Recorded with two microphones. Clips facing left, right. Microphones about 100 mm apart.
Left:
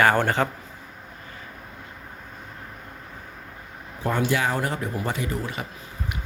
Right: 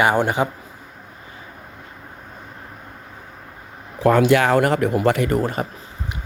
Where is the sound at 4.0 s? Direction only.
90° right; by 5.7 s 45° right (ahead or behind).